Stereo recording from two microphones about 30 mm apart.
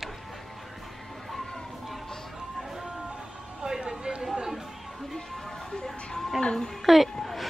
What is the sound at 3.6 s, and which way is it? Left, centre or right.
Vehicle, right.